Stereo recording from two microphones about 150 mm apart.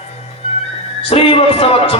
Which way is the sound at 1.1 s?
40° left (ahead or behind).